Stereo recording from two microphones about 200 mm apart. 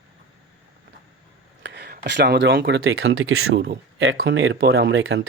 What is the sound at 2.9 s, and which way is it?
Speech, 90° right.